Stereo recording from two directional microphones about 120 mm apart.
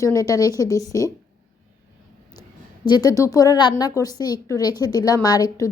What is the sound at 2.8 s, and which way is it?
A woman's voice, 35° left (ahead or behind).